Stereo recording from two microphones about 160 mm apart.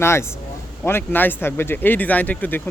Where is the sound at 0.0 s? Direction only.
15° left (ahead or behind).